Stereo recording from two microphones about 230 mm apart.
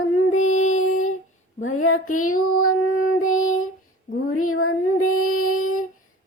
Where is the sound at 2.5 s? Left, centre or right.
Left.